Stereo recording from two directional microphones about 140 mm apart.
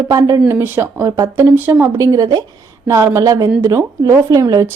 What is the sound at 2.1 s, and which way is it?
A woman's voice, 25° right (ahead or behind).